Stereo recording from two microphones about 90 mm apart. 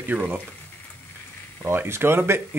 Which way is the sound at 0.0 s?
20° right (ahead or behind).